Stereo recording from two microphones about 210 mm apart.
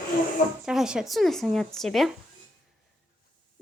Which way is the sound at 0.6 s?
5° right (ahead or behind).